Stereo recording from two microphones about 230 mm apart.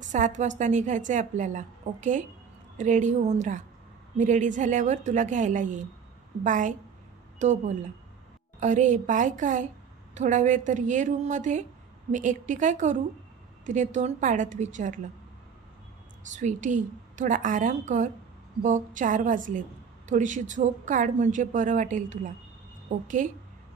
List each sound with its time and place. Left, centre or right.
0.0 s a sound: right
0.4 s a woman's voice: right
16.3 s a woman's voice: right